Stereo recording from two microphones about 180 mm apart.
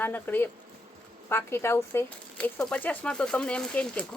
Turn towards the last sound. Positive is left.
turn(degrees=5)  # may be behind; listen again after turning